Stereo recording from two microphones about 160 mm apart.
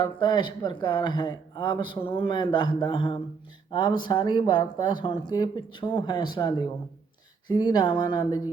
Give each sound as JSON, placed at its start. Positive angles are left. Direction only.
{"t": 0.0, "sound": "speech", "side_deg": 30}